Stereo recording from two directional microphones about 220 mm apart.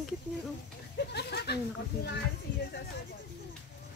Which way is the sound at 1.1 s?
50° left (ahead or behind).